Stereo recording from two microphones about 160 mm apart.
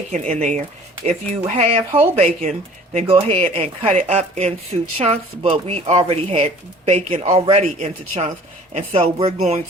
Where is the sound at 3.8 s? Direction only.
50° right (ahead or behind).